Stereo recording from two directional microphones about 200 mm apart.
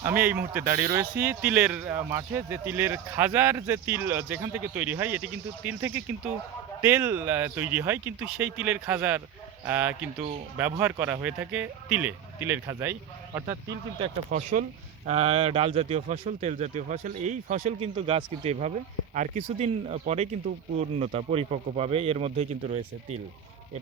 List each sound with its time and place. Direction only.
0.0 s speech: 10° right (ahead or behind)
14.3 s speech: 40° right (ahead or behind)